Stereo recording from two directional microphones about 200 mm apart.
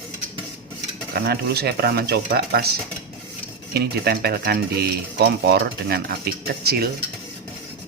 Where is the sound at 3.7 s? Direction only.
50° right (ahead or behind).